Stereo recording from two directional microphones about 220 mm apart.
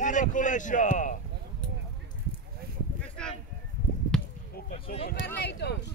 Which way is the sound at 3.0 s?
5° left (ahead or behind).